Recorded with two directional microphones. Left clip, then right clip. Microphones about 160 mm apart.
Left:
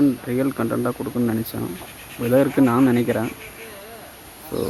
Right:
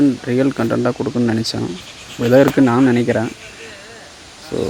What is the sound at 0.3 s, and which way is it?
Speech, 35° right (ahead or behind).